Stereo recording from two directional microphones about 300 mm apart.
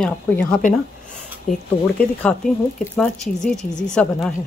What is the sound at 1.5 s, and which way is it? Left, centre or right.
Speech, left.